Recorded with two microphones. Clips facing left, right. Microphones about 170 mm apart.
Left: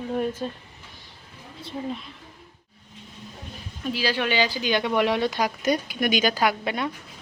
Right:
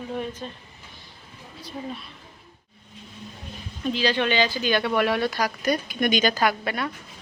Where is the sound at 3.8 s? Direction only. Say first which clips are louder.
Right 2 dB; 10° left (ahead or behind).